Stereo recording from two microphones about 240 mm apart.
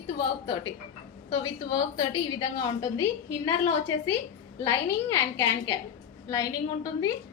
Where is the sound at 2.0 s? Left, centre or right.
Centre.